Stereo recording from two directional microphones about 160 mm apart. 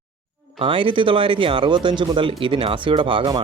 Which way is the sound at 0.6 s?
30° right (ahead or behind).